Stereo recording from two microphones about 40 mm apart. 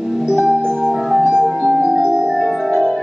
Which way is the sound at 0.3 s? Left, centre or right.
Centre.